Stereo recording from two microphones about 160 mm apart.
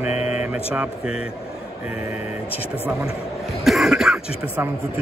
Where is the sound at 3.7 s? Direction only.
Centre (ahead or behind).